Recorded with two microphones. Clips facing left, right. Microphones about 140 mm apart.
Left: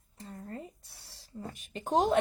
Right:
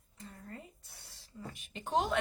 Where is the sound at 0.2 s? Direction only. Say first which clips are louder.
Left 6 dB; 35° left (ahead or behind).